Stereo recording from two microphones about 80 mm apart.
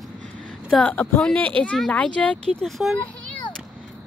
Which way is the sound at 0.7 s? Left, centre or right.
Centre.